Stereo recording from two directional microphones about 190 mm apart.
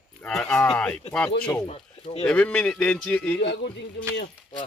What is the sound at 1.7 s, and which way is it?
Speech, 30° left (ahead or behind).